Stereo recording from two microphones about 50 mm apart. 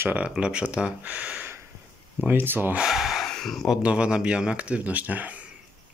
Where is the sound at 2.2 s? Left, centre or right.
Right.